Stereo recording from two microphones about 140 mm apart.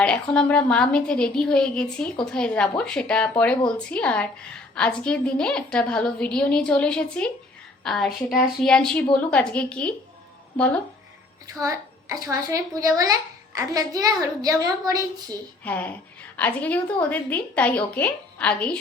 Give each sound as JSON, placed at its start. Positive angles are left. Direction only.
{"t": 0.0, "sound": "a woman's voice", "side_deg": 10}
{"t": 11.6, "sound": "a child's voice", "side_deg": -25}
{"t": 15.6, "sound": "a woman's voice", "side_deg": 10}